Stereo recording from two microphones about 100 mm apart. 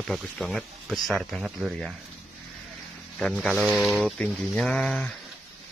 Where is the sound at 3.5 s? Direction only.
10° right (ahead or behind); by 5.1 s 10° left (ahead or behind).